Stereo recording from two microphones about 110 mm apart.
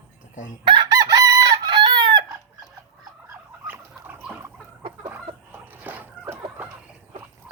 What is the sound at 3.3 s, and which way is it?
Rodents, 20° right (ahead or behind).